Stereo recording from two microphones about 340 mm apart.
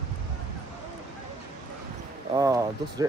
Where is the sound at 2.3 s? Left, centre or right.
Centre.